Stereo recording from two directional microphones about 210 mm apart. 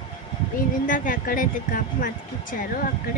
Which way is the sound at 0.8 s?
40° left (ahead or behind).